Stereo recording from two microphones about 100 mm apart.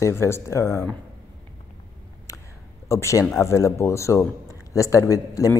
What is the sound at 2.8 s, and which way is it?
A man's voice, 30° left (ahead or behind).